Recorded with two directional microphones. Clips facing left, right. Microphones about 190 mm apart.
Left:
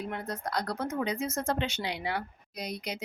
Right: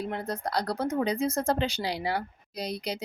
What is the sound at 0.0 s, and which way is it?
Speech, 30° right (ahead or behind).